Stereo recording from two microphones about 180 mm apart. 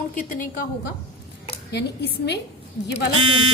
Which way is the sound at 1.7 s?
65° left (ahead or behind).